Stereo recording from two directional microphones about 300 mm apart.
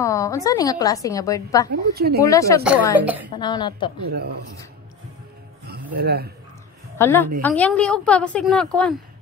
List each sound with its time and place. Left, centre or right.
0.0 s a woman's voice: centre
1.7 s a woman's voice: right
2.2 s a woman's voice: centre
2.6 s a woman's voice: centre
3.3 s a woman's voice: centre
5.7 s a man's voice: right
7.0 s a woman's voice: centre